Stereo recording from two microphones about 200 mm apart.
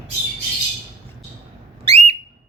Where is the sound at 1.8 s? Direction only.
30° right (ahead or behind).